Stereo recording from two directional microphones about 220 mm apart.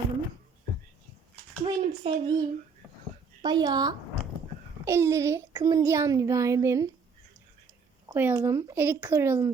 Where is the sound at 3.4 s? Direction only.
20° right (ahead or behind).